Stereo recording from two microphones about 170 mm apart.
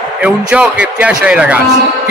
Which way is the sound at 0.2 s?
5° right (ahead or behind).